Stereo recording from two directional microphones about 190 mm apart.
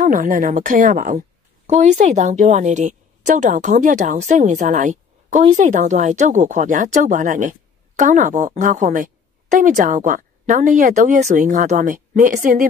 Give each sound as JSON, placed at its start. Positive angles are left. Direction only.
{"t": 0.0, "sound": "a woman's voice", "side_deg": -40}